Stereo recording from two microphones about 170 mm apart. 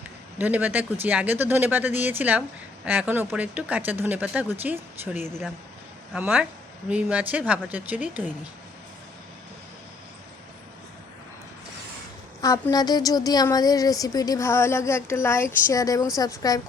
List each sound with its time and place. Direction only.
0.3 s speech: 10° right (ahead or behind)
12.4 s speech: 20° left (ahead or behind)